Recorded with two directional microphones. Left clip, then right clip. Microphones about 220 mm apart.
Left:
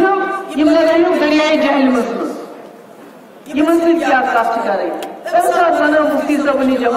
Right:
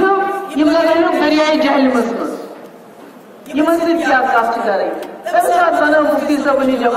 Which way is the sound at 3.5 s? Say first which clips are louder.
Left 1 dB; 30° right (ahead or behind).